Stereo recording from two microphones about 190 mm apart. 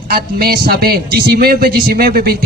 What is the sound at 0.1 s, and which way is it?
A man's voice, 50° right (ahead or behind).